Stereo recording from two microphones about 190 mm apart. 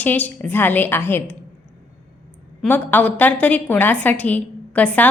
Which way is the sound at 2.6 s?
10° left (ahead or behind).